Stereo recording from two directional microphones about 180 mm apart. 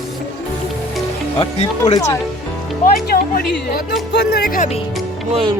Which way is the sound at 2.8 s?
55° left (ahead or behind).